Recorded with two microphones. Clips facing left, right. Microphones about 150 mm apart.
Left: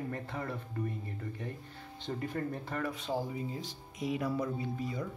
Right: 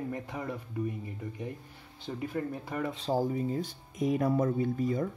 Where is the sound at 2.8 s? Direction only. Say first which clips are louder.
Right 4 dB; 25° right (ahead or behind).